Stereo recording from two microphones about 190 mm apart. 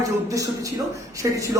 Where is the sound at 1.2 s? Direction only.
15° right (ahead or behind).